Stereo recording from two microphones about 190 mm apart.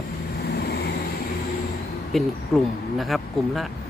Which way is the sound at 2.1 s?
Centre (ahead or behind).